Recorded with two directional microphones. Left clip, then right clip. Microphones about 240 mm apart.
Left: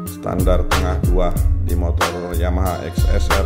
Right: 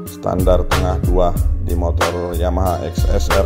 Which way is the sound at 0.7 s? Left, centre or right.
Centre.